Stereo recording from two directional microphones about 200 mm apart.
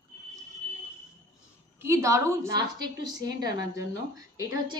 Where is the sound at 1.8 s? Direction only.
15° right (ahead or behind).